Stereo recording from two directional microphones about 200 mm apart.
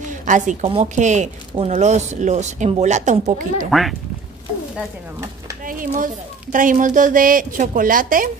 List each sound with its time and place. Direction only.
0.1 s speech: 40° right (ahead or behind)
3.7 s speech: centre (ahead or behind)
5.7 s speech: 45° right (ahead or behind)